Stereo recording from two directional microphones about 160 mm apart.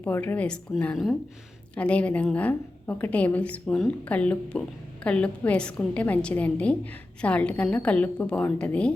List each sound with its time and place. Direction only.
0.0 s a woman's voice: 10° left (ahead or behind)